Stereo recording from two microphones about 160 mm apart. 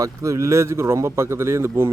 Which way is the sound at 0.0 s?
20° right (ahead or behind).